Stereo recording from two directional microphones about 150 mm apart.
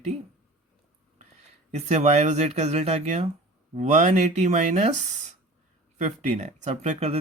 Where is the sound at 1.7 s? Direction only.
45° right (ahead or behind).